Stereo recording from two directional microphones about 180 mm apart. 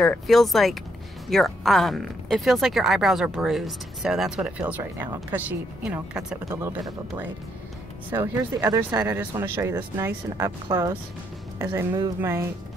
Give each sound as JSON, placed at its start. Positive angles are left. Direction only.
{"t": 0.0, "sound": "speech", "side_deg": 0}